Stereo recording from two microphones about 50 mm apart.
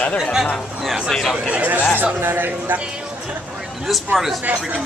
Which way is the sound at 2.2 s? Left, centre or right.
Right.